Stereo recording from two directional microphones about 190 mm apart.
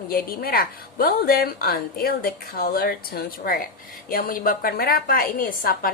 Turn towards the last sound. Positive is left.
turn(degrees=50)  # may be behind; listen again after turning